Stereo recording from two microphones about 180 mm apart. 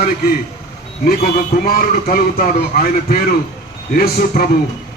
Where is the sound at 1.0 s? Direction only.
55° left (ahead or behind).